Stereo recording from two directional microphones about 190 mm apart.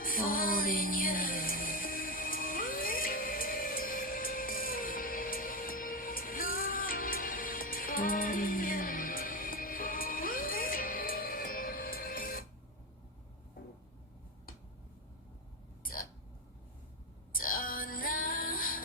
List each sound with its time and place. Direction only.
0.0 s music: 50° left (ahead or behind)
15.8 s hiccup: 50° left (ahead or behind)
17.3 s music: 50° left (ahead or behind)